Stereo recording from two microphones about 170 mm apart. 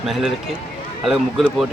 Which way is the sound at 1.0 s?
Centre (ahead or behind).